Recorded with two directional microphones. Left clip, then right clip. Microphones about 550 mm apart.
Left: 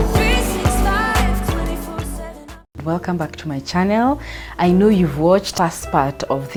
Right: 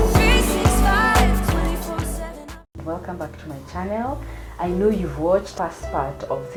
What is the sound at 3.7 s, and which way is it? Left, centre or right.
Speech, left.